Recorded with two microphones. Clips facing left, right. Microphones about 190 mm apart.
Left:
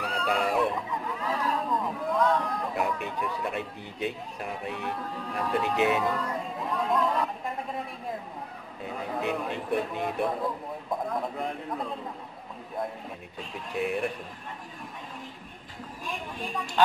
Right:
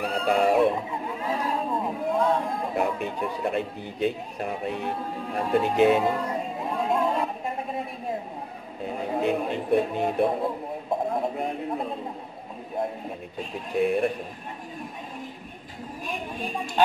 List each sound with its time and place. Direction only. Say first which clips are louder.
0.0 s speech: right 6 dB; 25° right (ahead or behind)
8.8 s speech: right 5 dB; 30° right (ahead or behind)